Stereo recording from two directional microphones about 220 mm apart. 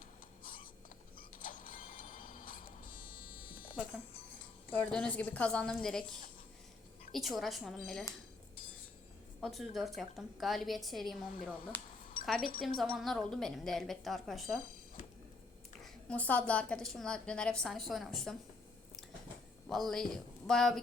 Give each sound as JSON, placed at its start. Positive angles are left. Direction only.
{"t": 0.4, "sound": "a sound", "side_deg": 40}
{"t": 1.4, "sound": "printer", "side_deg": 40}
{"t": 4.7, "sound": "a woman's voice", "side_deg": 5}
{"t": 9.4, "sound": "a woman's voice", "side_deg": 0}
{"t": 15.8, "sound": "a woman's voice", "side_deg": 5}
{"t": 19.6, "sound": "speech", "side_deg": 0}